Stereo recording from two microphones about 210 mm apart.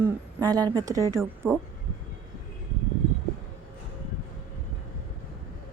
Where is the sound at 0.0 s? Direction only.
15° right (ahead or behind).